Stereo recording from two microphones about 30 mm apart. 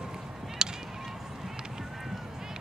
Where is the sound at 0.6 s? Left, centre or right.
Right.